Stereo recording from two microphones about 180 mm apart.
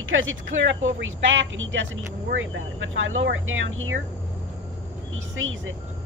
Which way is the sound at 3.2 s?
90° right.